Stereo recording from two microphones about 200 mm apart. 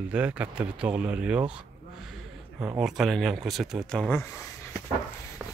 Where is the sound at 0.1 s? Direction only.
5° right (ahead or behind).